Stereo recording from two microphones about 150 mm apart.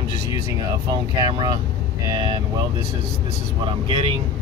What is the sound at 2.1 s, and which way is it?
Speech, 30° right (ahead or behind).